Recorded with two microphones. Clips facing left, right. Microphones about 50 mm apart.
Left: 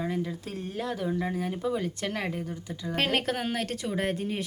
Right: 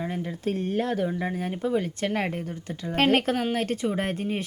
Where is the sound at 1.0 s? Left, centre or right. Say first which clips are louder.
Right 2 dB; centre.